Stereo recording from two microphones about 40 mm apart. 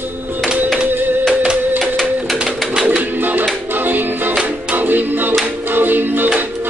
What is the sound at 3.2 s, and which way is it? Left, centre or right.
Music, right.